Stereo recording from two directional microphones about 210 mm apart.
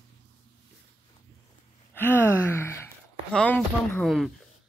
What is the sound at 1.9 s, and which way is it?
Gasp, 10° left (ahead or behind).